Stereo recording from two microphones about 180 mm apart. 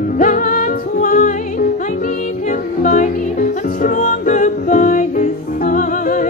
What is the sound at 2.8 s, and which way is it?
Music, 45° left (ahead or behind).